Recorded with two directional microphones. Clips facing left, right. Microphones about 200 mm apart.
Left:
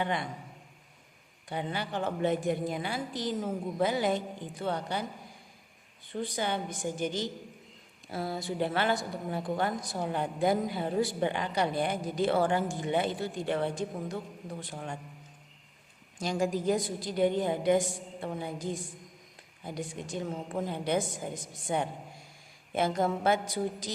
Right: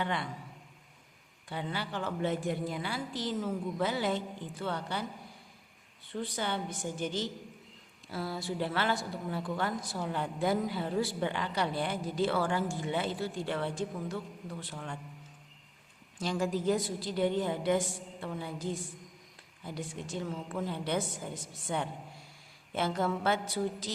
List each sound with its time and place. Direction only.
0.0 s a woman's voice: 15° left (ahead or behind)
1.5 s a woman's voice: 20° left (ahead or behind)
6.1 s a woman's voice: 15° left (ahead or behind)
8.4 s a woman's voice: 20° left (ahead or behind)
16.4 s a woman's voice: 15° left (ahead or behind)
20.2 s a woman's voice: 40° left (ahead or behind)
20.7 s a woman's voice: 15° left (ahead or behind)